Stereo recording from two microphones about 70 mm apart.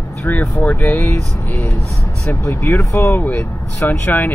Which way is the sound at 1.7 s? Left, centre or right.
Left.